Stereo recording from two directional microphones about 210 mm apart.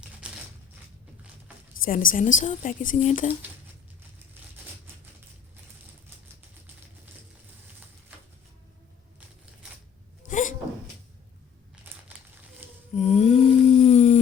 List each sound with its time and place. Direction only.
0.2 s crumpling: 5° right (ahead or behind)
1.8 s a woman's voice: 40° left (ahead or behind)
10.2 s a sound: 35° left (ahead or behind)
12.0 s crumpling: 10° right (ahead or behind)
13.0 s humming: 30° left (ahead or behind)